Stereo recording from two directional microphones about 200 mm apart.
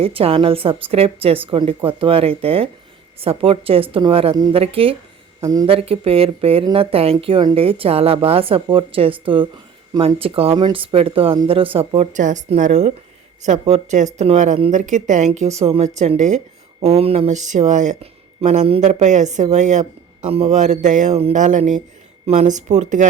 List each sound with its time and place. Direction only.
0.0 s speech: 30° right (ahead or behind)
5.4 s speech: 20° right (ahead or behind); by 23.0 s 35° right (ahead or behind)